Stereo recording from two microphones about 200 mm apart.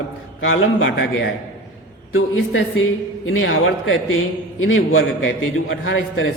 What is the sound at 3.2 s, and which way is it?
A man's voice, 80° left.